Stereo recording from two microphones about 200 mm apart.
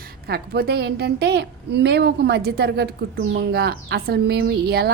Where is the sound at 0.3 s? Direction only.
50° right (ahead or behind).